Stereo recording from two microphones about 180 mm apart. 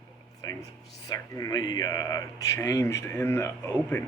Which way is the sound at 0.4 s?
20° left (ahead or behind).